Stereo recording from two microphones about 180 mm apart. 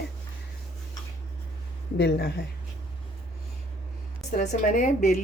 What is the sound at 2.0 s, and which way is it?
Speech, 65° left (ahead or behind).